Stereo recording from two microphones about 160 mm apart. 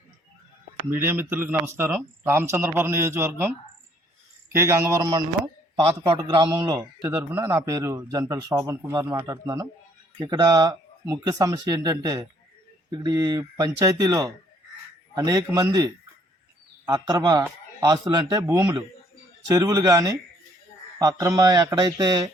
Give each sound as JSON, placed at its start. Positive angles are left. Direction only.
{"t": 0.9, "sound": "speech", "side_deg": -15}
{"t": 4.5, "sound": "a man's voice", "side_deg": -15}